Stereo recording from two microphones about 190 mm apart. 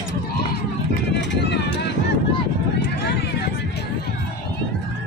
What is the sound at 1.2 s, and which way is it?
Run, 65° left (ahead or behind).